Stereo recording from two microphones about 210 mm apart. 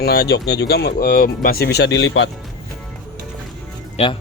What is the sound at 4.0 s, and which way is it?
Speech, 30° left (ahead or behind).